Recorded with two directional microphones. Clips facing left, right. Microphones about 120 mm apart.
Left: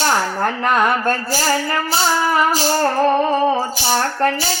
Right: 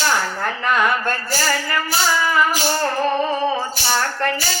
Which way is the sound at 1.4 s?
30° left (ahead or behind).